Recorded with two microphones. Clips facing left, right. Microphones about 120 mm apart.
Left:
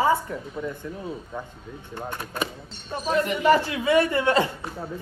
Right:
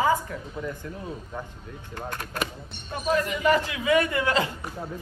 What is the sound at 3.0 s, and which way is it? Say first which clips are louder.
Speech: left 2 dB; 35° left (ahead or behind).